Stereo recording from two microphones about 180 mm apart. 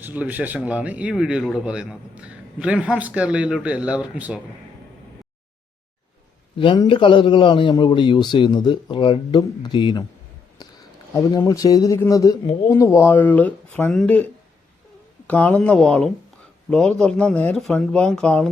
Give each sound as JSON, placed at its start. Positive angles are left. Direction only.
{"t": 0.0, "sound": "speech", "side_deg": -10}
{"t": 6.6, "sound": "a man's voice", "side_deg": 30}
{"t": 15.3, "sound": "speech", "side_deg": 10}